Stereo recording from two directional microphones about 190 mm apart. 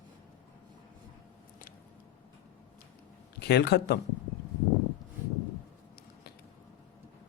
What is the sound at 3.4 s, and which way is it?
Speech, 60° left (ahead or behind).